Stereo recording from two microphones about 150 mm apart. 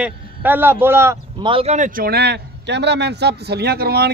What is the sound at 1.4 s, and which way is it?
Speech, 40° right (ahead or behind).